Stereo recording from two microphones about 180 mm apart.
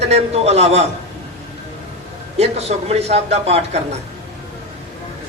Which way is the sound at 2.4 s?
35° right (ahead or behind).